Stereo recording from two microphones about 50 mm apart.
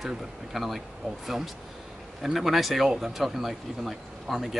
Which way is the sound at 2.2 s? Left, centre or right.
Centre.